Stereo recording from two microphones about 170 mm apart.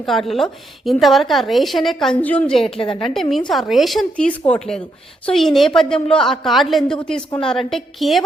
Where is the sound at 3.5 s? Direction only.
Centre (ahead or behind).